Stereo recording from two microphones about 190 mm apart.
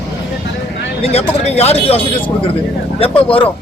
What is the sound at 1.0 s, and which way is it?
A man's voice, 35° left (ahead or behind).